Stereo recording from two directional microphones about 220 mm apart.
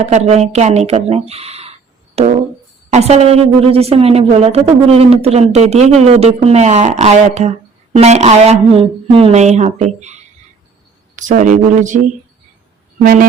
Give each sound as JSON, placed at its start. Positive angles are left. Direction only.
{"t": 0.0, "sound": "a woman's voice", "side_deg": -30}
{"t": 11.2, "sound": "speech", "side_deg": -35}
{"t": 13.0, "sound": "speech", "side_deg": -40}